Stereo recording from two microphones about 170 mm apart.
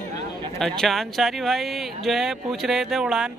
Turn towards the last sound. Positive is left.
turn(degrees=-5)  # may be behind; listen again after turning